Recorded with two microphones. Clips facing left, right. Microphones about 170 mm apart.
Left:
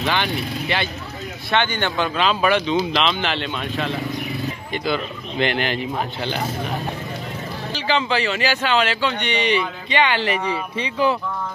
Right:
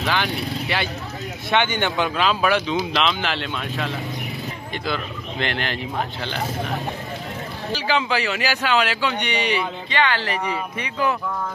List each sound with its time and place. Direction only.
0.0 s speech: 5° right (ahead or behind)
1.5 s a man's voice: 15° right (ahead or behind)
2.1 s speech: 5° right (ahead or behind)
7.7 s a man's voice: 5° right (ahead or behind)
9.8 s speech: 20° left (ahead or behind)